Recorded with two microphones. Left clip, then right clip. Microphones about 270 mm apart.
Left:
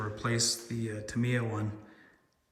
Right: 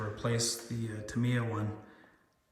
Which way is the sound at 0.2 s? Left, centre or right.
Centre.